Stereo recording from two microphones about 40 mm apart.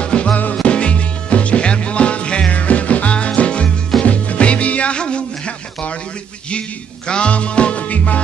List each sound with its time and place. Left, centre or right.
0.0 s music: left
7.1 s music: left